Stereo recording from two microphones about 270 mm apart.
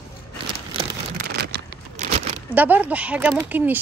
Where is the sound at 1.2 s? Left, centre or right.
Right.